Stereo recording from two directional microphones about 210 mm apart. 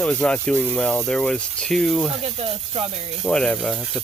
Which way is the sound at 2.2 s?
30° right (ahead or behind).